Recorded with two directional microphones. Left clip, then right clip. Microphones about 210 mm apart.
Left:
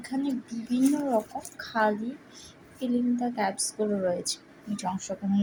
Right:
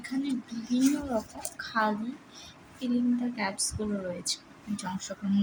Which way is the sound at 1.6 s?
10° left (ahead or behind).